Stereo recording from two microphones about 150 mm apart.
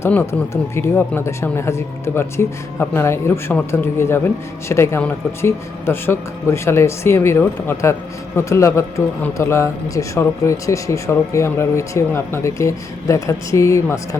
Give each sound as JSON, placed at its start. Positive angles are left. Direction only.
{"t": 0.0, "sound": "a man's voice", "side_deg": 15}